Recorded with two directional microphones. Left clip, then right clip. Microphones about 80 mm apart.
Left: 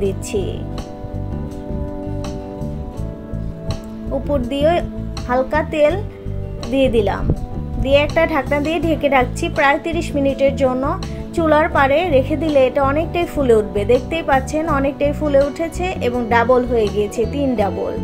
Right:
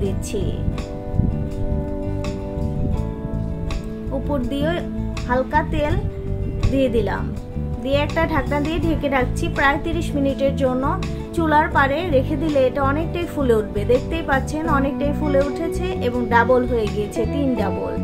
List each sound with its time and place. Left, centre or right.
0.0 s speech: centre
4.3 s a woman's voice: left